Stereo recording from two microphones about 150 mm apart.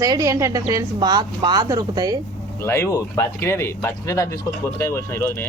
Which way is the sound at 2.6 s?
20° left (ahead or behind).